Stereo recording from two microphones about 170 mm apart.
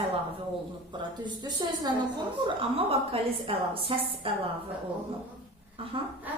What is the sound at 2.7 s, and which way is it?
A woman's voice, 35° right (ahead or behind).